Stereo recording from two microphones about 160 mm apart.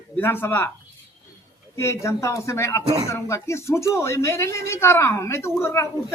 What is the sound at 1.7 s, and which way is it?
A man's voice, 15° left (ahead or behind).